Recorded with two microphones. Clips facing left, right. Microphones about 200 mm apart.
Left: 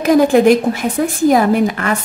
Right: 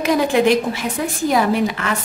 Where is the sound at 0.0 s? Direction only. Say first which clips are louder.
Left 6 dB; 45° left (ahead or behind).